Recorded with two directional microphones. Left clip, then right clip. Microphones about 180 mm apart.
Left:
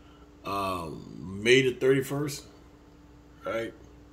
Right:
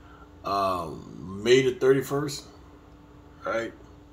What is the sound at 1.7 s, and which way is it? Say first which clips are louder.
Speech: right 3 dB; 15° left (ahead or behind).